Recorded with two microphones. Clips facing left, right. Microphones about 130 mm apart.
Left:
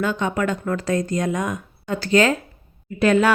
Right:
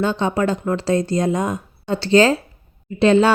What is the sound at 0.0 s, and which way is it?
Speech, 30° right (ahead or behind).